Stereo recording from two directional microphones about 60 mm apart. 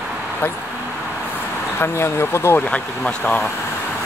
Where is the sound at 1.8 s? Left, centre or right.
Left.